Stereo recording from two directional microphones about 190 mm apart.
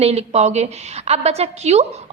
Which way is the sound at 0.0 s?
35° right (ahead or behind).